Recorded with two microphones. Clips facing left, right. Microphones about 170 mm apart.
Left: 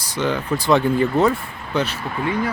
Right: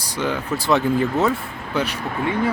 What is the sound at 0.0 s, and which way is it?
Speech, 10° right (ahead or behind).